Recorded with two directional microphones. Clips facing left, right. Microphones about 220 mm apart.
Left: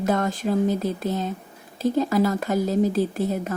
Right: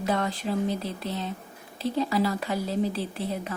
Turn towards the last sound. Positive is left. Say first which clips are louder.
# left 7 dB
turn(degrees=45)  # may be behind; listen again after turning